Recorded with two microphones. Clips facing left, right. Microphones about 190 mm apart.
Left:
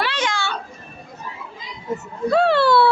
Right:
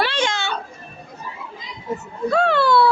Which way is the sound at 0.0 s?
30° right (ahead or behind).